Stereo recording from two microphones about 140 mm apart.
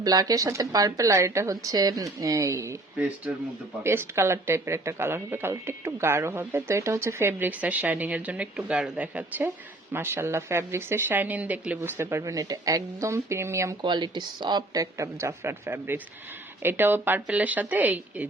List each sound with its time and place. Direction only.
0.0 s a woman's voice: 25° right (ahead or behind)
3.8 s a woman's voice: 20° right (ahead or behind)
13.8 s a woman's voice: 35° right (ahead or behind); by 18.3 s 10° right (ahead or behind)